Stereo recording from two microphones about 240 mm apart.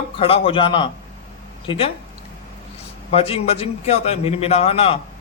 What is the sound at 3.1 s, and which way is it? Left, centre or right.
A man's voice, left.